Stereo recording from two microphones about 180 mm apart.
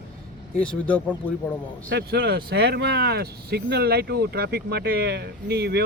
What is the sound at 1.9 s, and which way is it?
Speech, 65° right (ahead or behind).